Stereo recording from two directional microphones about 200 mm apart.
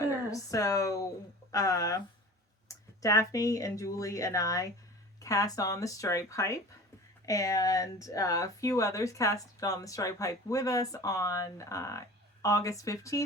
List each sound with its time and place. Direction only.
0.3 s speech: 15° left (ahead or behind)